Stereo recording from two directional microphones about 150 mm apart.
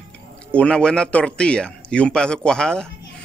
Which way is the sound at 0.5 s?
5° left (ahead or behind).